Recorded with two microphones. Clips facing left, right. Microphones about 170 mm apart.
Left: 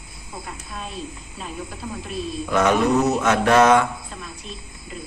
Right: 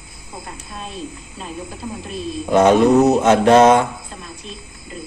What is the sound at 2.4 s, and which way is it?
Speech, 25° right (ahead or behind).